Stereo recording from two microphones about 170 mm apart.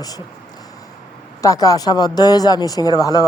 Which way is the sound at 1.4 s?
20° left (ahead or behind).